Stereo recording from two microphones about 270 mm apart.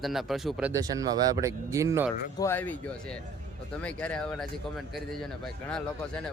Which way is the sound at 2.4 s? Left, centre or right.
Centre.